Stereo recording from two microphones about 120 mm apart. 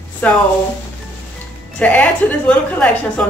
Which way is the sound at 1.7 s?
10° left (ahead or behind).